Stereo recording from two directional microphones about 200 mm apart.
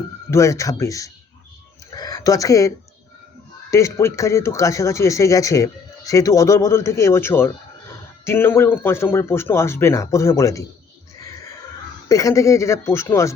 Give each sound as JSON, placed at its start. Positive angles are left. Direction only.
{"t": 0.3, "sound": "speech", "side_deg": 15}
{"t": 11.2, "sound": "a sound", "side_deg": 15}
{"t": 12.0, "sound": "speech", "side_deg": 15}